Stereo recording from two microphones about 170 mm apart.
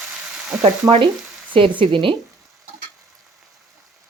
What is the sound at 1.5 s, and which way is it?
Speech, 30° right (ahead or behind).